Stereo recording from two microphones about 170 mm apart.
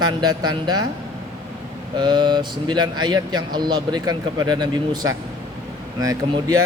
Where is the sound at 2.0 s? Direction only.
25° right (ahead or behind).